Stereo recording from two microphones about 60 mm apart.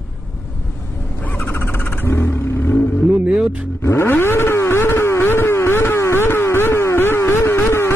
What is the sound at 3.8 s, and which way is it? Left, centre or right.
Vehicle, left.